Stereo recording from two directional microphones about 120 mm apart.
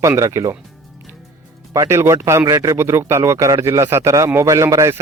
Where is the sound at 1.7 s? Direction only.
25° right (ahead or behind).